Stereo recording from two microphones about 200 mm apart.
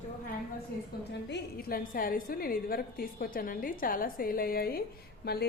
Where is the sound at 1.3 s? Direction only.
50° left (ahead or behind).